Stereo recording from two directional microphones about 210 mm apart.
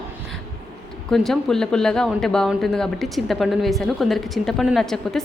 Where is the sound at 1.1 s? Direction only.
Centre (ahead or behind).